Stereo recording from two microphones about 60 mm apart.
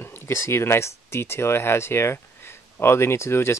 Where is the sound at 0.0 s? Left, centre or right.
Left.